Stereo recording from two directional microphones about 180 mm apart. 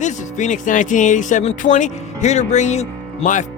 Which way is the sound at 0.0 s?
40° left (ahead or behind).